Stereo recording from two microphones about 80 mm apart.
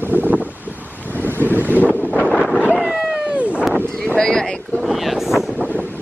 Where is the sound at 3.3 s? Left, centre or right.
Centre.